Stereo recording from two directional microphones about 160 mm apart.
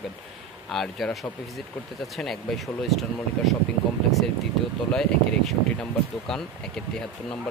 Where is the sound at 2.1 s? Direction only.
Centre (ahead or behind).